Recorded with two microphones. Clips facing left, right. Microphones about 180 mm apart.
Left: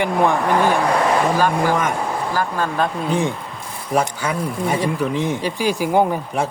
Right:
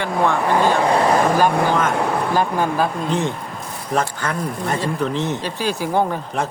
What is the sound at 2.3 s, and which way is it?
Speech, 20° right (ahead or behind).